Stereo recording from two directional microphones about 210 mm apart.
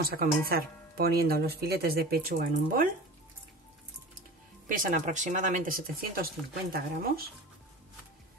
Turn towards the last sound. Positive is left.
turn(degrees=-45)  # may be behind; listen again after turning